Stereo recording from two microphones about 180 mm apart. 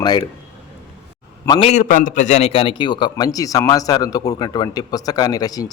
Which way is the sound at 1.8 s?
45° left (ahead or behind).